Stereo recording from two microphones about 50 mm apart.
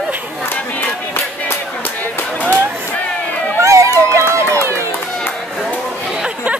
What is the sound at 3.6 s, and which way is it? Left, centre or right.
Crowd, right.